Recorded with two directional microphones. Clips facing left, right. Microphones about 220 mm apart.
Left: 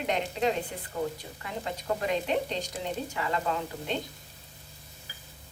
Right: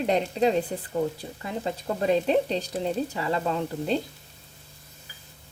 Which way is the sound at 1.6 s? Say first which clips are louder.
Right 5 dB; 35° right (ahead or behind).